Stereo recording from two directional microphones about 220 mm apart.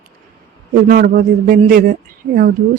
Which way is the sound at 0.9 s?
40° right (ahead or behind).